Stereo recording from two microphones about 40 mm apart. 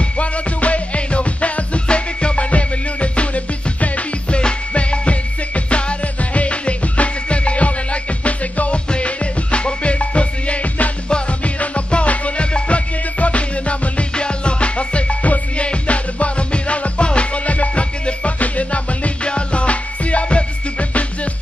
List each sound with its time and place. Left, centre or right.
0.0 s music: left
4.4 s music: left